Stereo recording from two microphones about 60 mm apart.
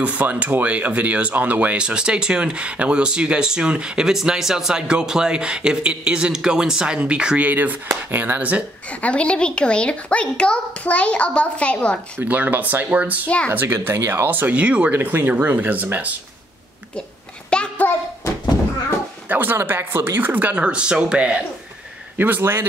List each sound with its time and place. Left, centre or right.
0.0 s speech: right
7.4 s speech: right
9.0 s a child's voice: centre
12.2 s speech: right
13.5 s speech: right
13.9 s speech: right
14.2 s speech: right
14.9 s speech: right
17.5 s a child's voice: centre
19.2 s speech: right
20.5 s speech: centre
22.1 s speech: right
22.4 s speech: right